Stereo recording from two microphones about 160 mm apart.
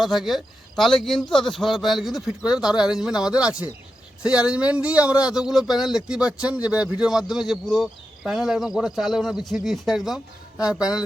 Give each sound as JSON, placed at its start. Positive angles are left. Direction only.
{"t": 0.0, "sound": "speech", "side_deg": 0}